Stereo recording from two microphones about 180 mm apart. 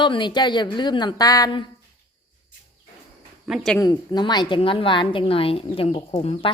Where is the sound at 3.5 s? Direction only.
Centre (ahead or behind).